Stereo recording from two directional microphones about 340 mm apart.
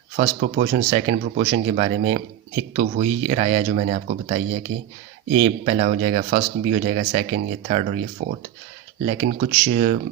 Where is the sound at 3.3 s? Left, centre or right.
Centre.